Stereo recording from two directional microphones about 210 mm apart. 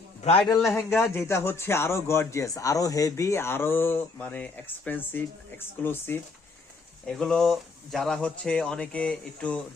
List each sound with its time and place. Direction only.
0.3 s a man's voice: 25° left (ahead or behind)
0.5 s a man's voice: centre (ahead or behind)